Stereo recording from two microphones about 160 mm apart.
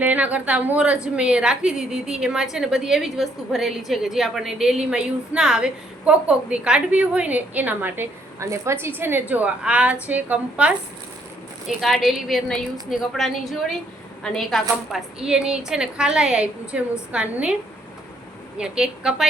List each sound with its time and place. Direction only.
0.0 s a woman's voice: 10° right (ahead or behind)